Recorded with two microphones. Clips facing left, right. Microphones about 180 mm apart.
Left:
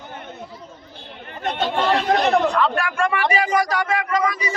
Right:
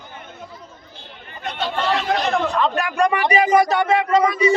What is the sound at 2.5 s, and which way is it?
Speech, 20° right (ahead or behind).